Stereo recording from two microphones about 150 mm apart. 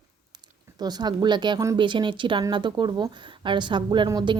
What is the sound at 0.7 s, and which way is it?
A woman's voice, 25° right (ahead or behind).